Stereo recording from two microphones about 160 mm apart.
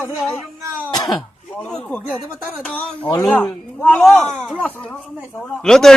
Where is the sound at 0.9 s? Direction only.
25° left (ahead or behind).